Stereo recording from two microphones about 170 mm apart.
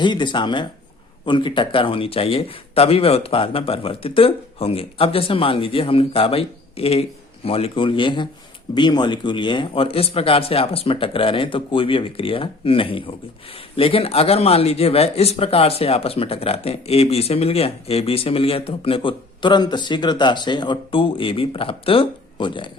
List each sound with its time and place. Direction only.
0.0 s a man's voice: 25° left (ahead or behind)